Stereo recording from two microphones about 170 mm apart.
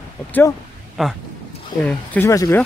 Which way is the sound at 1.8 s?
10° left (ahead or behind).